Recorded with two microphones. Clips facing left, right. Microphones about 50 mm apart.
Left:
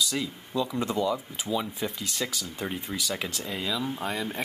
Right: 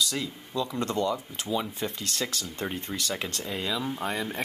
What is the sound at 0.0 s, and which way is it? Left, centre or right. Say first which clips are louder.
Speech: left 1 dB; centre.